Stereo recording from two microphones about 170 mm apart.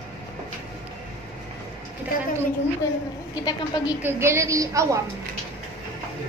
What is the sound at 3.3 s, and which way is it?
Speech, 25° left (ahead or behind).